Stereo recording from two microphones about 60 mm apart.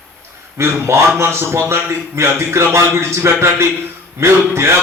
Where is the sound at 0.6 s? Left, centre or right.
Right.